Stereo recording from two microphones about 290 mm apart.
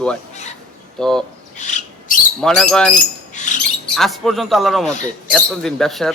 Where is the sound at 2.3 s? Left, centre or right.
Centre.